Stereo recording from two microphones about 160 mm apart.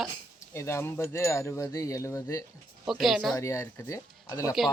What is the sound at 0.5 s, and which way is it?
Speech, 15° left (ahead or behind).